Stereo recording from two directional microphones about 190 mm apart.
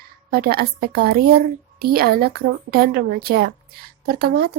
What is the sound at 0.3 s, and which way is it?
A woman's voice, 50° right (ahead or behind).